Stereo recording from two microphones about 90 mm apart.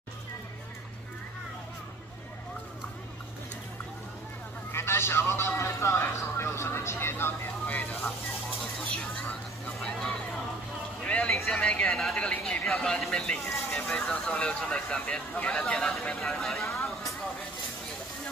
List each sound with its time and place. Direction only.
4.7 s a man's voice: 30° left (ahead or behind)
9.8 s vehicle: 5° left (ahead or behind)
11.0 s a sound: 15° left (ahead or behind)
11.3 s speech: 10° left (ahead or behind)
13.4 s vehicle: 30° left (ahead or behind)
13.8 s speech: 5° left (ahead or behind)